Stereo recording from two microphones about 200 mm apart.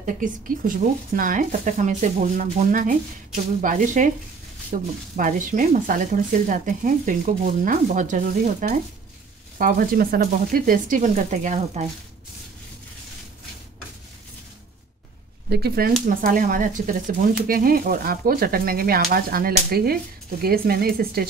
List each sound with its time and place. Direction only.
0.7 s speech: 45° right (ahead or behind)
15.5 s speech: 50° right (ahead or behind)